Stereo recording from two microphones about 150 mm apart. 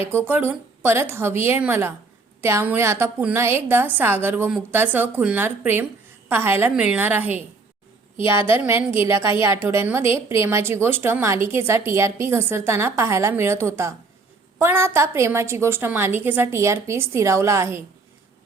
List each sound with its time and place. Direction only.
0.1 s a woman's voice: 15° right (ahead or behind)
8.5 s a woman's voice: 15° right (ahead or behind)